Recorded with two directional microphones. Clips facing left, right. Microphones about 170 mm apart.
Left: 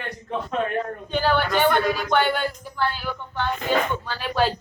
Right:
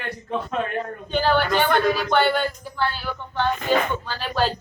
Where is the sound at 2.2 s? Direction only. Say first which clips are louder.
Right 2 dB; 10° left (ahead or behind).